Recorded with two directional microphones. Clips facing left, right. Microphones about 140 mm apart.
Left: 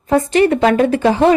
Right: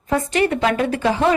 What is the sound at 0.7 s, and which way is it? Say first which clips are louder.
Speech: left 6 dB; 35° left (ahead or behind).